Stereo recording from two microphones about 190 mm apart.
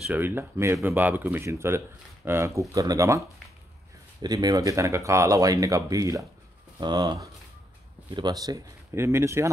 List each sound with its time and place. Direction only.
0.0 s speech: 10° right (ahead or behind)